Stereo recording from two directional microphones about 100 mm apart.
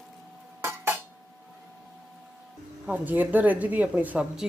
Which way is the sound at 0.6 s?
25° right (ahead or behind).